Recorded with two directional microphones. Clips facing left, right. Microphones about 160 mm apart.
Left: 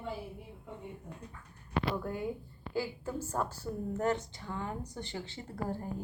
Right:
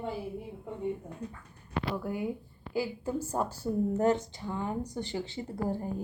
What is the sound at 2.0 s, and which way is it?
Speech, 10° right (ahead or behind).